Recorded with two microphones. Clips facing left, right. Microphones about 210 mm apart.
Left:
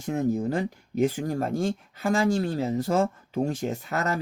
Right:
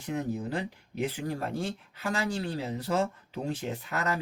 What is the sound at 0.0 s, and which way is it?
Speech, 45° left (ahead or behind).